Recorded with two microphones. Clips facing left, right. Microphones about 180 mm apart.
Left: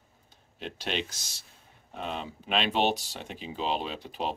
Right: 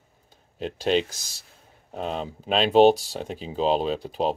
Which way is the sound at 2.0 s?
35° right (ahead or behind).